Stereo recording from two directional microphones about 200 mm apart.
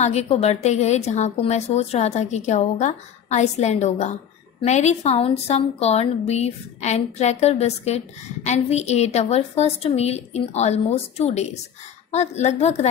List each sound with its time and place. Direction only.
0.0 s speech: 35° left (ahead or behind)